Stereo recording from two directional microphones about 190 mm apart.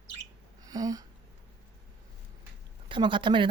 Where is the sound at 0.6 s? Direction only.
20° right (ahead or behind).